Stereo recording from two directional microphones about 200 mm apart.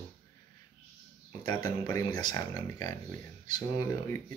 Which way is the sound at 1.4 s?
20° left (ahead or behind).